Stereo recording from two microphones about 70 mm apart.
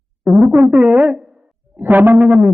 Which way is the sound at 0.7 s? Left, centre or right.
Right.